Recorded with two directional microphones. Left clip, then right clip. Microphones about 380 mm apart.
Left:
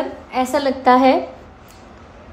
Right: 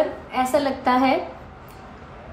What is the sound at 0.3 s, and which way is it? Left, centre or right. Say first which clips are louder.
Speech: left 5 dB; left.